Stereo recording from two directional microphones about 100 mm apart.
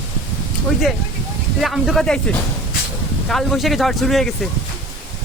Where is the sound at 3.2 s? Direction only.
Centre (ahead or behind).